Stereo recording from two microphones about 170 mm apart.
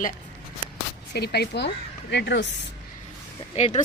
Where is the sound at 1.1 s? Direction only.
70° left (ahead or behind).